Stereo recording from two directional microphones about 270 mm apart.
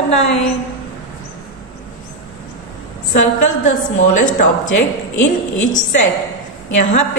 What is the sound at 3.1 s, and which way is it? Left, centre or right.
A woman's voice, left.